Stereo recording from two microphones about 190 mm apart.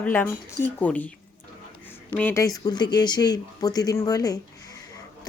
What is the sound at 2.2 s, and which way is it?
Speech, 15° left (ahead or behind).